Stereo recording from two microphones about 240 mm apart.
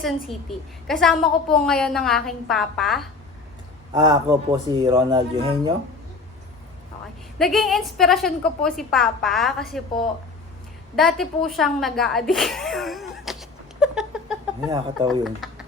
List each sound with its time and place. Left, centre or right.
0.0 s a woman's voice: centre
3.9 s speech: centre
7.3 s a woman's voice: centre
10.9 s a woman's voice: centre
14.7 s speech: centre
15.2 s speech: centre